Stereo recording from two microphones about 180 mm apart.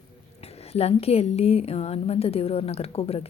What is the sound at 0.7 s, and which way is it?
A woman's voice, 35° left (ahead or behind).